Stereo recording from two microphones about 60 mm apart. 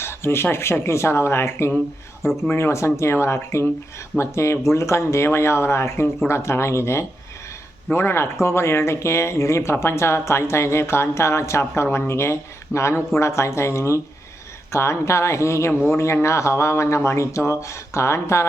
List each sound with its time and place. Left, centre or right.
0.0 s speech: left